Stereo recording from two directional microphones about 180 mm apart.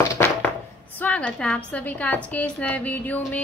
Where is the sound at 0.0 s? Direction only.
15° left (ahead or behind).